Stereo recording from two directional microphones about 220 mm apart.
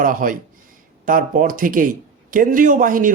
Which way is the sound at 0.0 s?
40° right (ahead or behind).